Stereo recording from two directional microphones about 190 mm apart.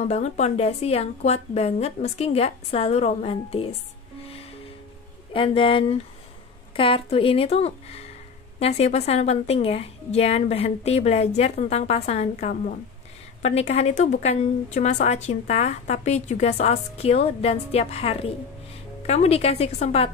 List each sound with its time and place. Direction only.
0.0 s a woman's voice: 35° left (ahead or behind)
5.3 s a woman's voice: 25° left (ahead or behind)